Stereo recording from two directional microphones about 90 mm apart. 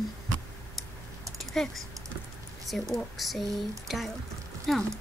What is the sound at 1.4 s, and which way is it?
Speech, 5° left (ahead or behind).